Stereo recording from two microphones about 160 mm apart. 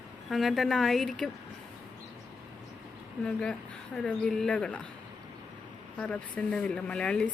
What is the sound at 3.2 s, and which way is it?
Speech, 5° left (ahead or behind).